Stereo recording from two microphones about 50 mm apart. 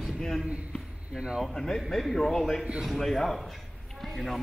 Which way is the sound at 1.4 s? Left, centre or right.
Centre.